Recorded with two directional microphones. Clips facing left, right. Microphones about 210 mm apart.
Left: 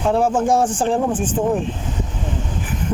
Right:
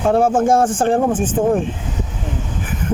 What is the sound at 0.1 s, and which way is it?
Speech, 50° right (ahead or behind).